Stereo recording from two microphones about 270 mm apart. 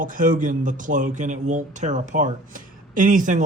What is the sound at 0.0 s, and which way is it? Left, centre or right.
A man's voice, right.